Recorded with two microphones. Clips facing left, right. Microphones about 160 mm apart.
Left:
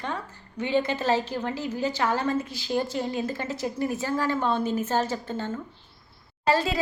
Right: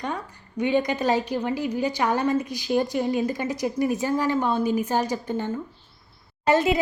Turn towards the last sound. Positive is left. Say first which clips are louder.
# right 4 dB
turn(degrees=-20)  # may be behind; listen again after turning